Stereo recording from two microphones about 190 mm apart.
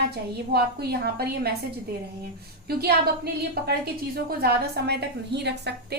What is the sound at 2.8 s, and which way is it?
A woman's voice, 55° right (ahead or behind).